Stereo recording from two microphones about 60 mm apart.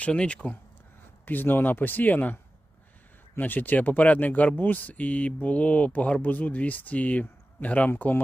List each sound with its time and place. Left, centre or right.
0.0 s speech: centre
1.2 s speech: left